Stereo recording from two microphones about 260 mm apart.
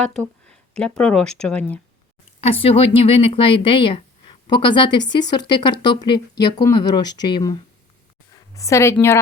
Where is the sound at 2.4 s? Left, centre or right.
Left.